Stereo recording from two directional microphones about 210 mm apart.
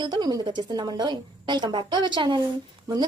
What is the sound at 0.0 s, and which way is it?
A woman's voice, 20° right (ahead or behind).